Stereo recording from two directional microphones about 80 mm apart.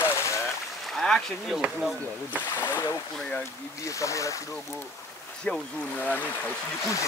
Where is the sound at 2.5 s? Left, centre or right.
Left.